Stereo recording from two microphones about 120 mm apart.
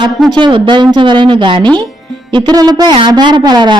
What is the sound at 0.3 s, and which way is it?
A woman's voice, 40° right (ahead or behind).